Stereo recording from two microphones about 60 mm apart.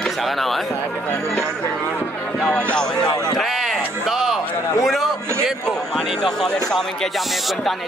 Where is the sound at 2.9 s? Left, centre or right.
Left.